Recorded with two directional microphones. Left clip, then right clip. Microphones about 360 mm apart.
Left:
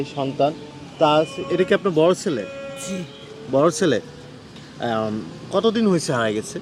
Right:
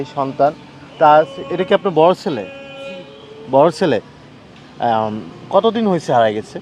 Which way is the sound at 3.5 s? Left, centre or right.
Centre.